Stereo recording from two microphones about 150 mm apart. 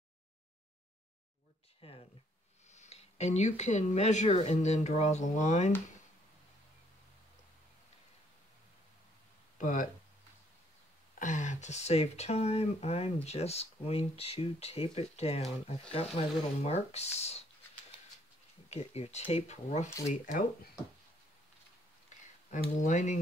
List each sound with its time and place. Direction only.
1.8 s speech: 40° left (ahead or behind)
2.7 s speech: 50° left (ahead or behind)
9.6 s speech: 60° left (ahead or behind)
11.1 s speech: 55° left (ahead or behind)
18.7 s speech: 45° left (ahead or behind)
22.8 s speech: 55° left (ahead or behind)